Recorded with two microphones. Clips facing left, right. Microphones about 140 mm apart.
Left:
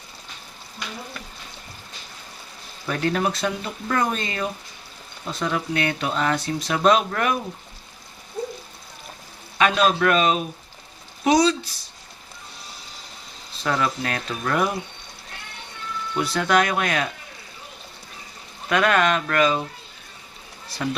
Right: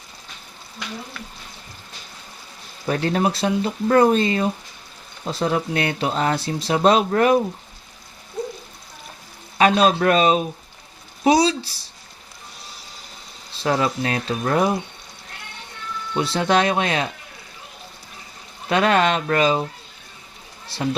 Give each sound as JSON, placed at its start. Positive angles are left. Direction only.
{"t": 2.8, "sound": "speech", "side_deg": -35}
{"t": 9.6, "sound": "speech", "side_deg": -35}
{"t": 13.6, "sound": "speech", "side_deg": -30}
{"t": 16.1, "sound": "speech", "side_deg": -25}
{"t": 18.7, "sound": "speech", "side_deg": -30}
{"t": 20.7, "sound": "speech", "side_deg": -30}